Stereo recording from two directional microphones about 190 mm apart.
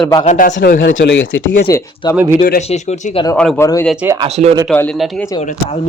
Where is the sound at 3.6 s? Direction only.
15° left (ahead or behind).